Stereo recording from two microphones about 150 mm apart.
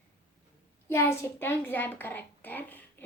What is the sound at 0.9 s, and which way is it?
A woman's voice, 15° left (ahead or behind).